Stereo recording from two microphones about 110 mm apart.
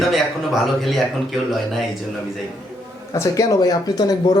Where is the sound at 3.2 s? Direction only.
30° left (ahead or behind).